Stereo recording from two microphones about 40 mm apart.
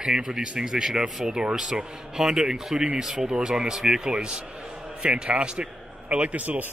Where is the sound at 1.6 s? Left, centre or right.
Centre.